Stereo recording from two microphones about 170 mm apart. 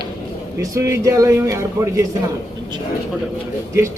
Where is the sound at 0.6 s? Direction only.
20° right (ahead or behind).